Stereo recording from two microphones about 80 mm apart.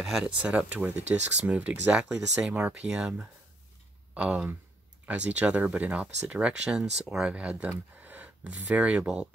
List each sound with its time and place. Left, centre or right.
0.0 s speech: centre